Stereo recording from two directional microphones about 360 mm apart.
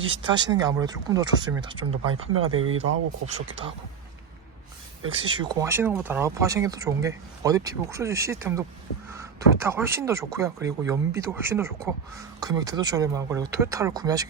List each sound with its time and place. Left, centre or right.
0.0 s speech: centre
2.5 s speech: right
5.1 s speech: centre